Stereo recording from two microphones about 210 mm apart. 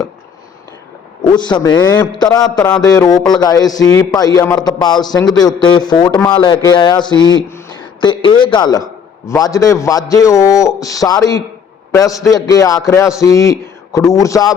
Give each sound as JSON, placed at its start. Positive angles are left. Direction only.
{"t": 1.3, "sound": "a man's voice", "side_deg": 20}